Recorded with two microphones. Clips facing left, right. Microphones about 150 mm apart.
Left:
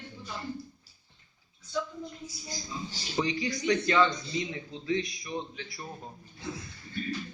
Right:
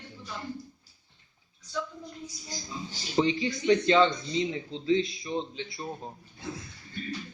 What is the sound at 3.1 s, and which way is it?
Speech, 25° right (ahead or behind).